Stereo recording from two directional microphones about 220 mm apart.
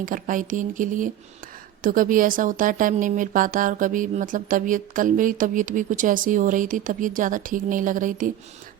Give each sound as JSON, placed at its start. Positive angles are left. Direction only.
{"t": 0.0, "sound": "speech", "side_deg": -35}